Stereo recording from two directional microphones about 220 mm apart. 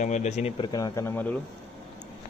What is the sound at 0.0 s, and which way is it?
Speech, 30° left (ahead or behind).